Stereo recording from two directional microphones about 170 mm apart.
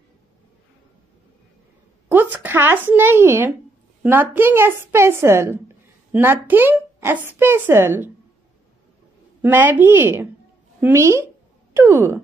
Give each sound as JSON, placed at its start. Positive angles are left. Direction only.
{"t": 2.0, "sound": "a woman's voice", "side_deg": -10}
{"t": 9.4, "sound": "a woman's voice", "side_deg": -10}
{"t": 11.7, "sound": "a sound", "side_deg": -15}